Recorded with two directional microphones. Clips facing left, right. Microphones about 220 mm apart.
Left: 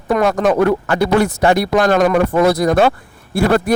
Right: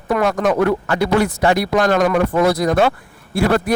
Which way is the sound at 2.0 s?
40° left (ahead or behind).